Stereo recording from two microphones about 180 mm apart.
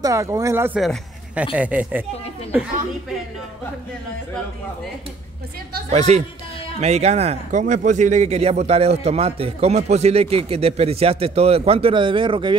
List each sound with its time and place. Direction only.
0.0 s speech: 15° right (ahead or behind)
0.7 s speech: 5° right (ahead or behind)
5.9 s speech: 40° right (ahead or behind)